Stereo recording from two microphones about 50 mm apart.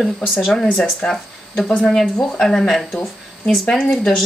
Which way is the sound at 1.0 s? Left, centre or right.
Centre.